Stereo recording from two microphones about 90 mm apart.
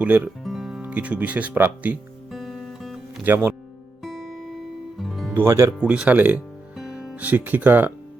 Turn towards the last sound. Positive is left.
turn(degrees=-20)  # may be behind; listen again after turning